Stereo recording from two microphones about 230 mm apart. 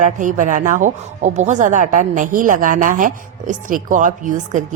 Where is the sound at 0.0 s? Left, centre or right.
Right.